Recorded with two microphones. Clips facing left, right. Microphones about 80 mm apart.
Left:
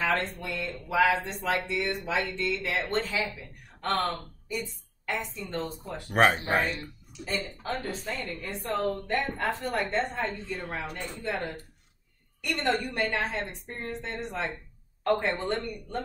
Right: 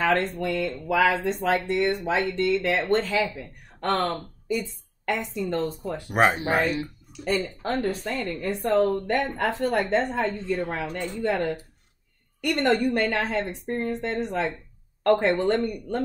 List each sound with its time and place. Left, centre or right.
0.0 s a woman's voice: right
6.0 s speech: centre
7.1 s speech: right